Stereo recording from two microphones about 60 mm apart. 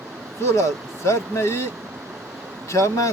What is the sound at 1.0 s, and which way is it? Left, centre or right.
Speech, left.